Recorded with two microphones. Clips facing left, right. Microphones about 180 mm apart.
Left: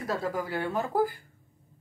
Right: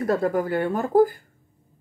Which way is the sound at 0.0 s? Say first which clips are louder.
Right 9 dB; 55° right (ahead or behind).